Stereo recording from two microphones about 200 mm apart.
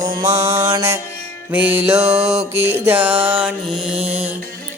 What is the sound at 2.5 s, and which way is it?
Music, 10° right (ahead or behind).